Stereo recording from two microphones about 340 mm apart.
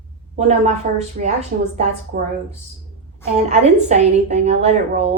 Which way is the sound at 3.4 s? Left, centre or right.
Centre.